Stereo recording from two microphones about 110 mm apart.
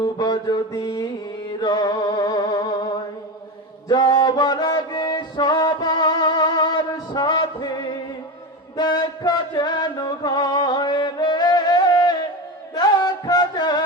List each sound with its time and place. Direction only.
0.0 s mantra: 40° left (ahead or behind)
1.6 s music: 40° left (ahead or behind)